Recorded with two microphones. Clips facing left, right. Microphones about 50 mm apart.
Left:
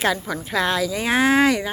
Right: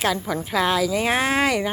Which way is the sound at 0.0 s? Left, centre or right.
Centre.